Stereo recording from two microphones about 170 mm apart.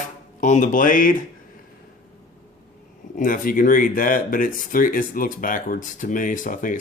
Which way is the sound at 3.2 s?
55° left (ahead or behind).